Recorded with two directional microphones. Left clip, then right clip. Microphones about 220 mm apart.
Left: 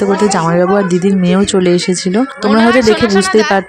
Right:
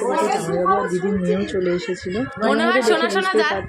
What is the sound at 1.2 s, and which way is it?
Speech, 45° left (ahead or behind).